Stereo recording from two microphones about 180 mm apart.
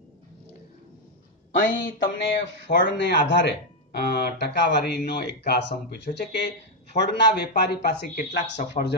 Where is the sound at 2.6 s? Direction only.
70° left (ahead or behind).